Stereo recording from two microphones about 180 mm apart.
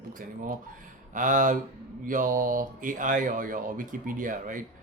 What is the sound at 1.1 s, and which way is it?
Speech, 45° right (ahead or behind).